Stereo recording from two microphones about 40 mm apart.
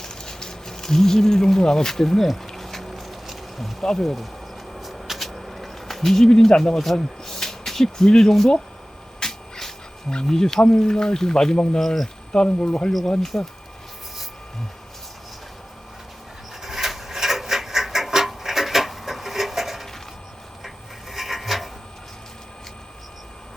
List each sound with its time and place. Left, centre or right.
0.0 s speech: centre
2.5 s bee: centre
3.8 s speech: centre
4.7 s a sound: centre
6.6 s speech: centre
9.2 s a sound: centre
10.2 s speech: centre
13.1 s speech: centre
16.6 s a sound: centre